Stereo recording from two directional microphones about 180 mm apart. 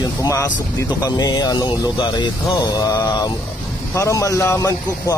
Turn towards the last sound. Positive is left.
turn(degrees=15)  # may be behind; listen again after turning